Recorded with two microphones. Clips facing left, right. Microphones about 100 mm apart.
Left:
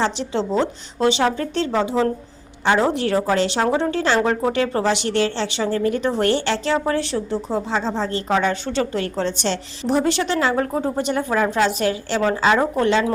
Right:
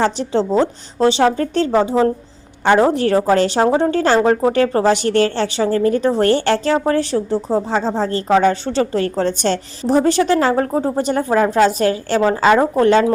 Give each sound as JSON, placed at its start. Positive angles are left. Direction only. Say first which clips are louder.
{"t": 0.0, "sound": "a woman's voice", "louder": "right 5 dB", "side_deg": -40}